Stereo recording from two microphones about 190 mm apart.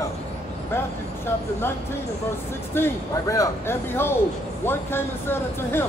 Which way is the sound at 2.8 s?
15° left (ahead or behind).